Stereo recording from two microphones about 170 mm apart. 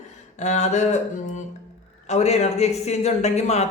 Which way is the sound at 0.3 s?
45° left (ahead or behind).